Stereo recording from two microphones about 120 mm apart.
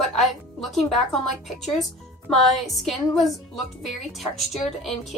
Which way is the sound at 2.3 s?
Centre (ahead or behind).